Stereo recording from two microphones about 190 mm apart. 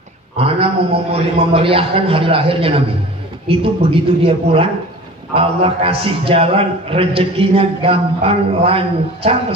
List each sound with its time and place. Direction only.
0.4 s a man's voice: 30° right (ahead or behind)